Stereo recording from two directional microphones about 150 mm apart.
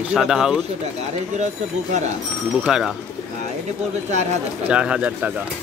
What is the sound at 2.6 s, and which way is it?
Speech, 5° right (ahead or behind).